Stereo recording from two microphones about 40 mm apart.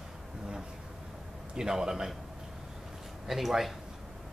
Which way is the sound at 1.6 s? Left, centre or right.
Centre.